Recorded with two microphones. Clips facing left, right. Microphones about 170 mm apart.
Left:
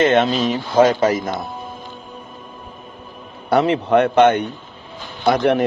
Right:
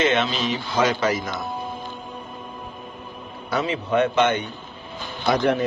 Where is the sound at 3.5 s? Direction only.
65° left (ahead or behind).